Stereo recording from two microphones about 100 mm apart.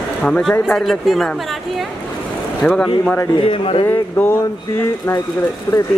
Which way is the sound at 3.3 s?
65° left (ahead or behind).